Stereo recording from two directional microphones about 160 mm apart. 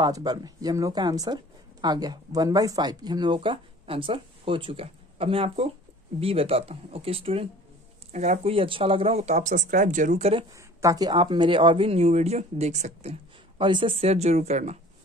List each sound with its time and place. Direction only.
0.0 s speech: 25° right (ahead or behind); by 10.4 s 45° right (ahead or behind)
10.8 s speech: 20° right (ahead or behind); by 14.8 s 40° right (ahead or behind)